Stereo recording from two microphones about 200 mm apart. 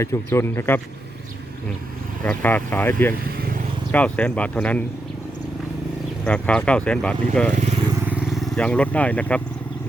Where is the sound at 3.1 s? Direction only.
45° right (ahead or behind).